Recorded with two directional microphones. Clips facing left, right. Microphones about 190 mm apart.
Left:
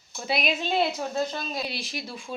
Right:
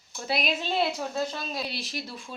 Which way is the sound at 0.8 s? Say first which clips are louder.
Left 1 dB; 20° left (ahead or behind).